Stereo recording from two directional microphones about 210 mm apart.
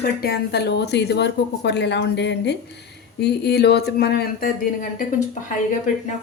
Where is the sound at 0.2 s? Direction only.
50° left (ahead or behind).